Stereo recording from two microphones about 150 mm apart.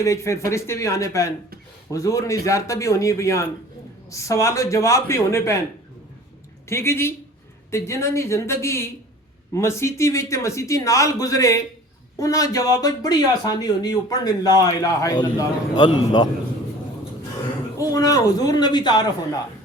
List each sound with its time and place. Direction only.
0.0 s speech: 20° left (ahead or behind)
6.7 s a woman's voice: 15° left (ahead or behind)
17.7 s speech: 25° left (ahead or behind)